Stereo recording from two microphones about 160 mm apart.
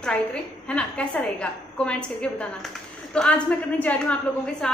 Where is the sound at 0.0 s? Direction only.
5° left (ahead or behind).